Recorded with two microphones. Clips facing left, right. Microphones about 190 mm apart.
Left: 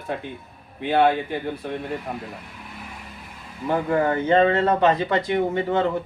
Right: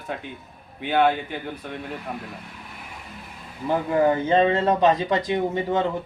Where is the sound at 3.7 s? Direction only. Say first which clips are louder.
Right 1 dB; 15° right (ahead or behind).